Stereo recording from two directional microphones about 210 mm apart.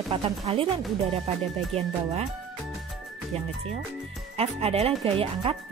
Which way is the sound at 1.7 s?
30° right (ahead or behind).